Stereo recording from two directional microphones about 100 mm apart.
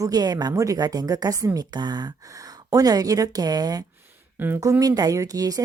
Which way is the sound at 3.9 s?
20° right (ahead or behind).